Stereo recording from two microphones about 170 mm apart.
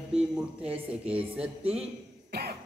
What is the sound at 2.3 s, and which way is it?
Music, 75° right (ahead or behind).